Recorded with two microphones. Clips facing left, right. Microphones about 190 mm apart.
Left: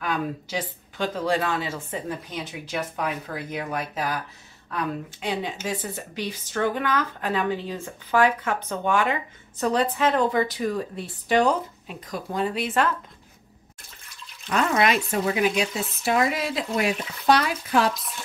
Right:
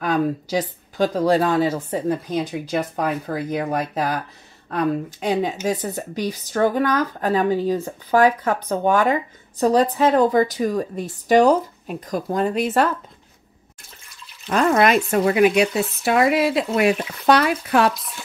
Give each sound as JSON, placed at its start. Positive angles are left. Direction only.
{"t": 0.0, "sound": "speech", "side_deg": -40}
{"t": 14.5, "sound": "speech", "side_deg": -40}
{"t": 15.0, "sound": "speech", "side_deg": -65}